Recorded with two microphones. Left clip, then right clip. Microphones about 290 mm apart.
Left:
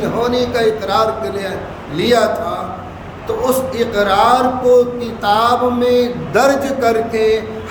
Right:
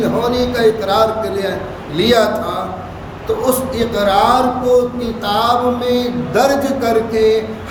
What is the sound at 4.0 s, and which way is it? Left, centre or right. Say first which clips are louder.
A man's voice: even; centre.